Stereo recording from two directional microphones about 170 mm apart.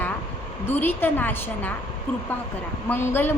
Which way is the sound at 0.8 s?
10° left (ahead or behind).